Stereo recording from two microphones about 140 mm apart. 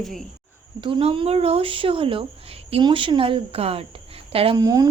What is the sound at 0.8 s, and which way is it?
Speech, 40° right (ahead or behind).